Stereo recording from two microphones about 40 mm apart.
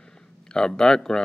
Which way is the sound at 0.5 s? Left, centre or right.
Centre.